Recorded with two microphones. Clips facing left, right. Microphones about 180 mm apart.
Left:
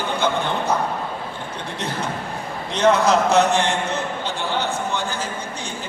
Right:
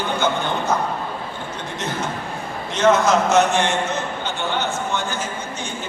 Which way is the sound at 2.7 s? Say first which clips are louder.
Even; 35° left (ahead or behind).